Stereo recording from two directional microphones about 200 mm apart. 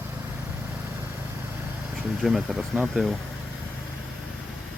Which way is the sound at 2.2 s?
Centre (ahead or behind).